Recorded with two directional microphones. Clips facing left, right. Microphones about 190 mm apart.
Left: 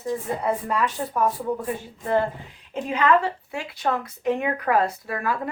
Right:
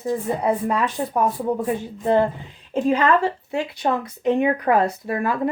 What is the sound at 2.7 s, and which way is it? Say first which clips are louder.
Speech: right 3 dB; 30° right (ahead or behind).